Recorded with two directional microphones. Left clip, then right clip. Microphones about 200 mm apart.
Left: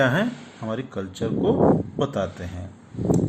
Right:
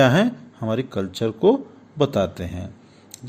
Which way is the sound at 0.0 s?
50° right (ahead or behind).